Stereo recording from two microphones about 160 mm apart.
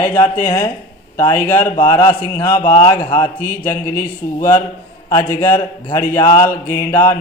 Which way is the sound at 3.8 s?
60° left (ahead or behind).